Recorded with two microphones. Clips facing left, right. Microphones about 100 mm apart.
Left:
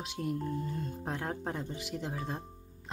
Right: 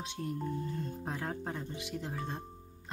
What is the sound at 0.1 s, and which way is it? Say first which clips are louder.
Speech: left 3 dB; 5° left (ahead or behind).